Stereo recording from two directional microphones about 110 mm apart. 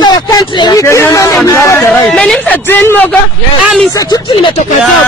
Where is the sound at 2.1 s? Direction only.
10° left (ahead or behind).